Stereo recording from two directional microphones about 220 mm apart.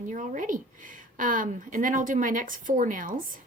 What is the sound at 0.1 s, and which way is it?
A woman's voice, 35° right (ahead or behind).